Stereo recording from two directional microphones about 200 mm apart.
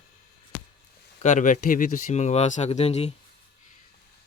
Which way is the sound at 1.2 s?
40° left (ahead or behind).